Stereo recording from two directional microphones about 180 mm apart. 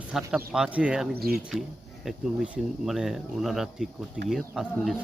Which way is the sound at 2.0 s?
5° right (ahead or behind).